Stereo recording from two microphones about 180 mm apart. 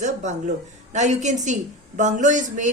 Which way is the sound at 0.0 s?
40° right (ahead or behind).